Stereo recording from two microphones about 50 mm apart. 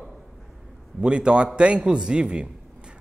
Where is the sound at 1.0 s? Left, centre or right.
Centre.